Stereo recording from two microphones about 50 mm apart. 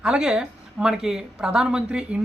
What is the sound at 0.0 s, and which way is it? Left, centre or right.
A woman's voice, centre.